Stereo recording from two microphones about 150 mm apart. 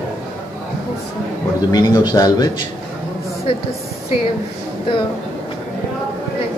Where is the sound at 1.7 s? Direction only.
30° left (ahead or behind).